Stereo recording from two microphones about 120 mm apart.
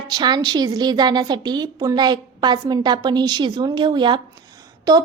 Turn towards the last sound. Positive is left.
turn(degrees=-35)  # may be behind; listen again after turning